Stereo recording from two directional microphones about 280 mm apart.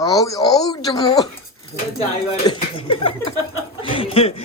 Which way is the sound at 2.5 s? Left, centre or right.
Centre.